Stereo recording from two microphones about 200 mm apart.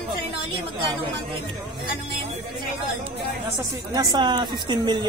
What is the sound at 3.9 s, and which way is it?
Speech, 20° right (ahead or behind).